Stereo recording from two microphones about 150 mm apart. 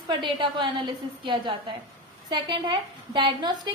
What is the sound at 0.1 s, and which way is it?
A woman's voice, 30° right (ahead or behind).